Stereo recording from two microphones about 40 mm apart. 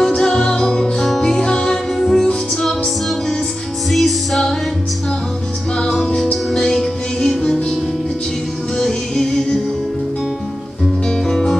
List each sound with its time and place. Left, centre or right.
0.0 s music: centre
0.9 s music: centre
1.2 s music: centre
3.9 s music: centre
5.8 s music: centre
8.7 s music: centre
11.1 s music: centre